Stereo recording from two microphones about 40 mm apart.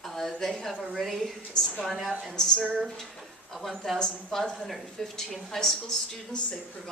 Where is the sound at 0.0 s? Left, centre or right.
Centre.